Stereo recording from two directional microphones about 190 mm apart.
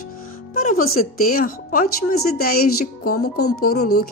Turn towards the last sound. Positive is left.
turn(degrees=55)  # may be behind; listen again after turning